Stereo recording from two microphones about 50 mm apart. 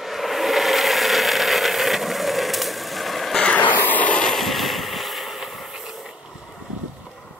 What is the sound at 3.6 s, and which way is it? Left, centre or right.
Vehicle, left.